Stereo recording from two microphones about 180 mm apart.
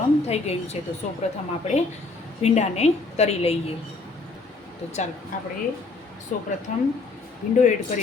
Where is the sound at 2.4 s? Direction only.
35° left (ahead or behind).